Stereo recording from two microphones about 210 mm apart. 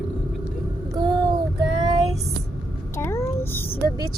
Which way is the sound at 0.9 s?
20° right (ahead or behind).